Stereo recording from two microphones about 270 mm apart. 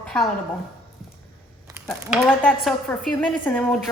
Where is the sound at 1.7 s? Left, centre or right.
Centre.